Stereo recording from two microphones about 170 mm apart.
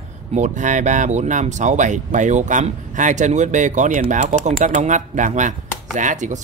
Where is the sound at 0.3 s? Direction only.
45° right (ahead or behind).